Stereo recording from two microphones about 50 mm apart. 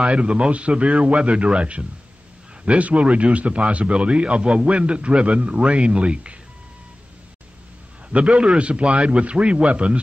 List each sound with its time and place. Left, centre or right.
0.0 s a man's voice: right
8.1 s a man's voice: right